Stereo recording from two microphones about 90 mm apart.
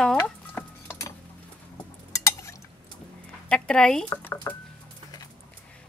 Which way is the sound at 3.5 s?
10° left (ahead or behind).